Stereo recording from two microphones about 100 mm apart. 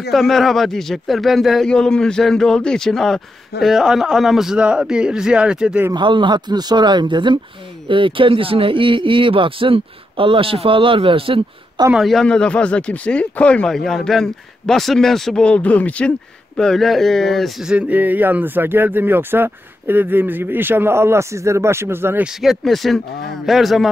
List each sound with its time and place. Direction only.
0.1 s a man's voice: centre (ahead or behind)
5.9 s speech: 55° right (ahead or behind)
11.9 s speech: centre (ahead or behind)
17.6 s speech: 15° right (ahead or behind)
22.2 s speech: centre (ahead or behind)